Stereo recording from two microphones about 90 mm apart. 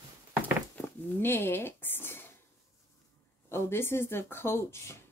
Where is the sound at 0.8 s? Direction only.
25° left (ahead or behind).